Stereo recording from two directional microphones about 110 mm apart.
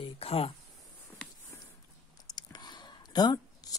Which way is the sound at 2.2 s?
40° left (ahead or behind).